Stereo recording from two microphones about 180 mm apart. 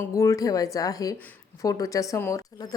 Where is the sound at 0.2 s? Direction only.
20° left (ahead or behind).